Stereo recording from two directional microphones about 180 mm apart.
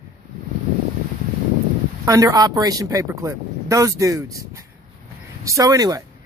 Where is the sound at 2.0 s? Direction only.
20° right (ahead or behind).